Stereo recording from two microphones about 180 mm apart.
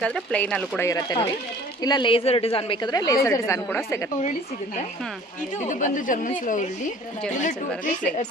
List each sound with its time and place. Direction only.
0.0 s speech: 5° left (ahead or behind)
0.8 s a woman's voice: 20° left (ahead or behind)
5.6 s speech: 45° left (ahead or behind)